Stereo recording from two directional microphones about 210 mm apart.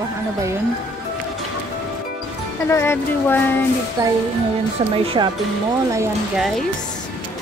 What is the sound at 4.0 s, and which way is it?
Speech, 20° right (ahead or behind).